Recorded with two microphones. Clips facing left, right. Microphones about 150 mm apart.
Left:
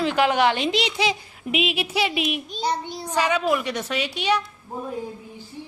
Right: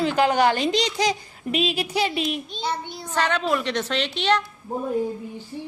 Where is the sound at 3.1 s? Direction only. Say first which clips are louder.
Left 1 dB; 10° left (ahead or behind).